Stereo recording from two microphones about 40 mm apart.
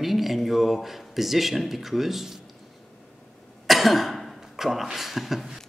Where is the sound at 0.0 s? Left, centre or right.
Centre.